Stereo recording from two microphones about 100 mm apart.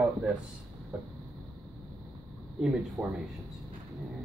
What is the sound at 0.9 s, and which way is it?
Vehicle, 15° right (ahead or behind).